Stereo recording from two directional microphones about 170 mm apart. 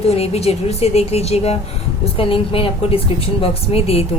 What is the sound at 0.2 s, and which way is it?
A woman's voice, 35° left (ahead or behind).